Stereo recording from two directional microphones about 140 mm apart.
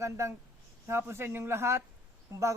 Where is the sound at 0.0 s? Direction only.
20° right (ahead or behind).